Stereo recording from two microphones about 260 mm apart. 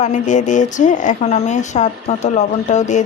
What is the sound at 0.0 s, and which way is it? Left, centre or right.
Speech, left.